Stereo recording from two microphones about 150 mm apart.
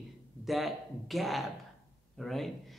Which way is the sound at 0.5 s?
Centre (ahead or behind).